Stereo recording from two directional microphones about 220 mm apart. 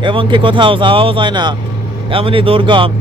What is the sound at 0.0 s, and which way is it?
Speech, 20° right (ahead or behind).